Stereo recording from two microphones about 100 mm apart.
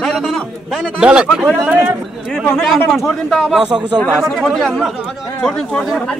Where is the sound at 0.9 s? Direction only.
10° right (ahead or behind).